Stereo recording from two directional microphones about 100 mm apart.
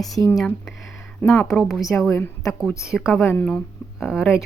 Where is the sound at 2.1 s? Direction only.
30° left (ahead or behind).